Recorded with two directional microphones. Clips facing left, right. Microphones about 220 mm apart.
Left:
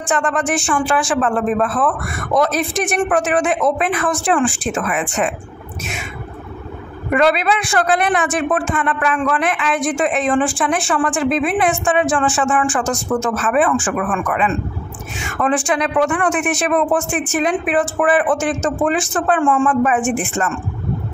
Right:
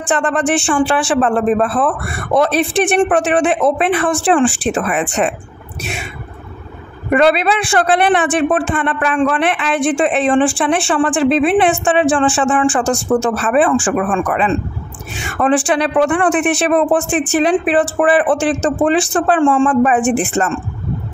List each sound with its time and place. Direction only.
0.0 s a man's voice: 35° right (ahead or behind)
7.2 s a man's voice: 30° right (ahead or behind)